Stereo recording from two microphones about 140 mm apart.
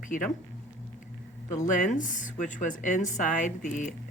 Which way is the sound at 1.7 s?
65° left (ahead or behind).